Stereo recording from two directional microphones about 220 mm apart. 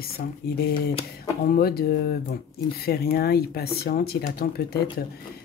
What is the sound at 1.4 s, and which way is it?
Speech, 45° left (ahead or behind).